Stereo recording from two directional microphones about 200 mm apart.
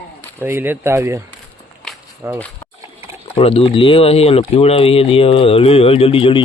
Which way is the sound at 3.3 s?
30° left (ahead or behind).